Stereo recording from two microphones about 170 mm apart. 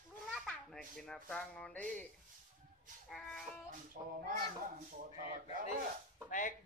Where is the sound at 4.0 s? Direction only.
50° right (ahead or behind).